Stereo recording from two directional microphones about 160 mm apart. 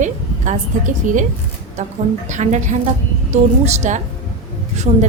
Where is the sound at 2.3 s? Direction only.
50° right (ahead or behind).